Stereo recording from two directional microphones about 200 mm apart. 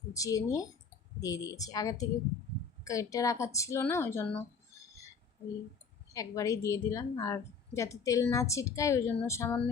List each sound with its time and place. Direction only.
0.1 s a woman's voice: 15° left (ahead or behind)
6.1 s a woman's voice: 15° left (ahead or behind)